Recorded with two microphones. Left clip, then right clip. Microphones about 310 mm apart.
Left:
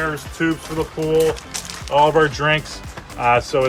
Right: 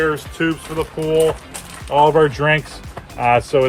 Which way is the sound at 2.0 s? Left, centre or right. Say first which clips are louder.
Right 2 dB; right.